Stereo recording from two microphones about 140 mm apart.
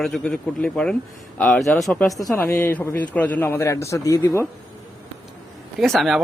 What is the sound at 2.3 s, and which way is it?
A man's voice, 15° left (ahead or behind).